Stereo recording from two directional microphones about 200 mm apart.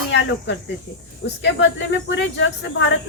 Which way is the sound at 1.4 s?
65° left (ahead or behind).